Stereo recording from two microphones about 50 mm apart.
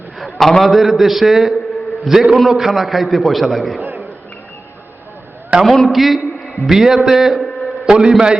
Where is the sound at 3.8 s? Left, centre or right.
Right.